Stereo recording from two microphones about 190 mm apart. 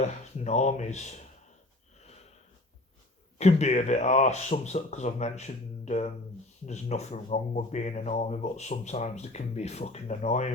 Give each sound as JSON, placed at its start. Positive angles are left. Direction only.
{"t": 0.0, "sound": "speech", "side_deg": 35}
{"t": 3.3, "sound": "speech", "side_deg": 35}